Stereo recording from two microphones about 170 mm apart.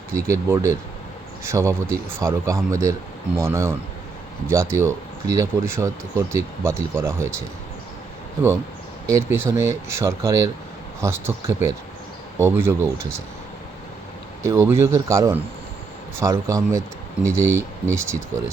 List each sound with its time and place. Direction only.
0.1 s speech: 15° right (ahead or behind)
9.0 s speech: 15° right (ahead or behind)
14.4 s speech: 15° right (ahead or behind)